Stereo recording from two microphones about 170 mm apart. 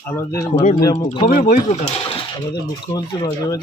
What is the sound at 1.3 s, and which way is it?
Speech, 60° left (ahead or behind).